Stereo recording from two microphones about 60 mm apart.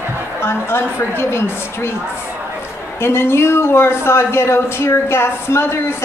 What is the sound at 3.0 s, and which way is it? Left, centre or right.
Speech, left.